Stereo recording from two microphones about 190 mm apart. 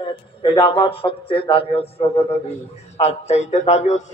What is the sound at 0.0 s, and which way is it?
A man's voice, 25° left (ahead or behind).